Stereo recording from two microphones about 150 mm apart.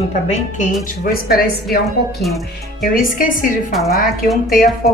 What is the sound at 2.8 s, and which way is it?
Speech, 70° left (ahead or behind).